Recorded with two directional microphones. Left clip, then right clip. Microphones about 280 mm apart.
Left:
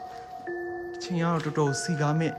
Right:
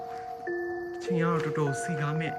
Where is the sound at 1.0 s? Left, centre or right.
Centre.